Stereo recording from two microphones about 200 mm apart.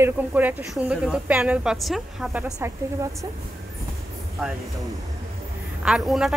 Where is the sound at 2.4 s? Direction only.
15° right (ahead or behind).